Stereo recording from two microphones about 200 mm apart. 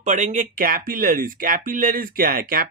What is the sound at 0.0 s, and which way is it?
Speech, 35° right (ahead or behind).